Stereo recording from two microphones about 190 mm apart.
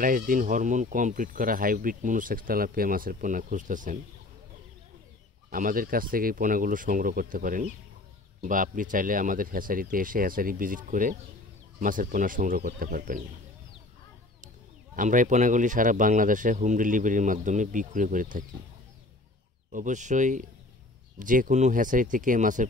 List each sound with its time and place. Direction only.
0.0 s speech: 45° right (ahead or behind)
5.5 s speech: 45° right (ahead or behind)
15.0 s speech: 45° right (ahead or behind)
19.7 s speech: 40° right (ahead or behind)